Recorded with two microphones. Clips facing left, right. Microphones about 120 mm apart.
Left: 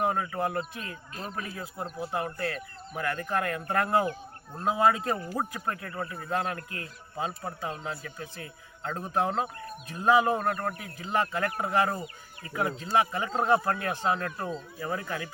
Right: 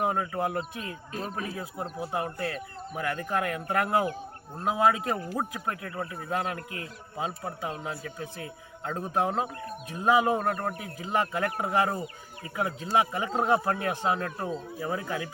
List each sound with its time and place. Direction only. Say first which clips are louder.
0.0 s speech: even; 20° right (ahead or behind)